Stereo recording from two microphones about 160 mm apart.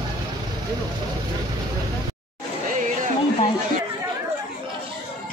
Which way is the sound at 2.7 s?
50° right (ahead or behind).